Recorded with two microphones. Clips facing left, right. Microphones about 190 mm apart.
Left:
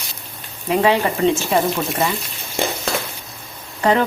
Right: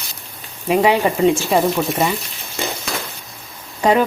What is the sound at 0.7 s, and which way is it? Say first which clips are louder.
A woman's voice: right 2 dB; 15° right (ahead or behind).